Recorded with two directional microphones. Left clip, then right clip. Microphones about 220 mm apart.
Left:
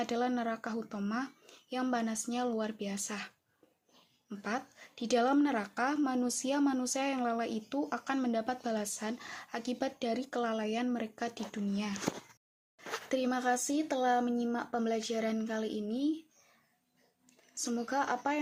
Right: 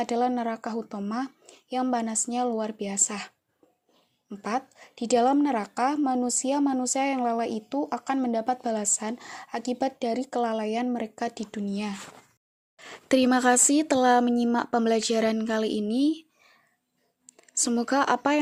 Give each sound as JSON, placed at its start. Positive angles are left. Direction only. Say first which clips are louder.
{"t": 0.0, "sound": "a woman's voice", "louder": "right 7 dB", "side_deg": -25}
{"t": 12.7, "sound": "speech", "louder": "right 10 dB", "side_deg": -45}
{"t": 17.6, "sound": "speech", "louder": "right 9 dB", "side_deg": -45}